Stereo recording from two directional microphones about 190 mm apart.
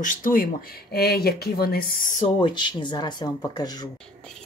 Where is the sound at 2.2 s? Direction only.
25° left (ahead or behind).